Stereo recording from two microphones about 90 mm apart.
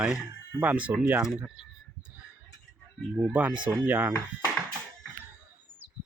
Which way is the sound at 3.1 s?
15° right (ahead or behind).